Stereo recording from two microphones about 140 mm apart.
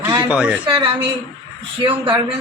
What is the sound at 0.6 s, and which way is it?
Speech, 35° right (ahead or behind).